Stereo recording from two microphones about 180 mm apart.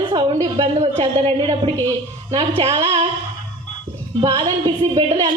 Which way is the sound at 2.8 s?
35° right (ahead or behind).